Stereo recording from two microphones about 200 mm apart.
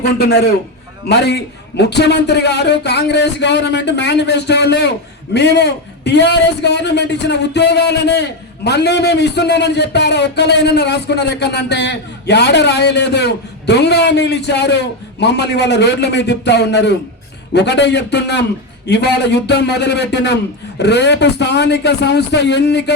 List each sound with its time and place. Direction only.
0.0 s a man's voice: 55° left (ahead or behind)